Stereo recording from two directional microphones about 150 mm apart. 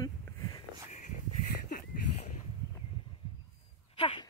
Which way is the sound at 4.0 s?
40° left (ahead or behind).